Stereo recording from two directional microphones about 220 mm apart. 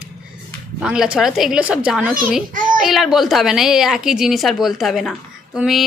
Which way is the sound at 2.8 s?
Centre (ahead or behind).